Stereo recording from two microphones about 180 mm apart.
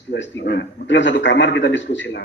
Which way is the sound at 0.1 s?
80° left.